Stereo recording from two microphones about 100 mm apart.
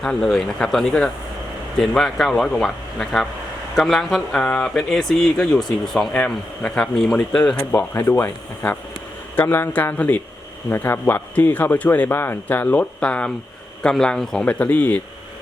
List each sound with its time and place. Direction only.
0.0 s speech: 5° left (ahead or behind)
7.7 s a man's voice: 20° left (ahead or behind)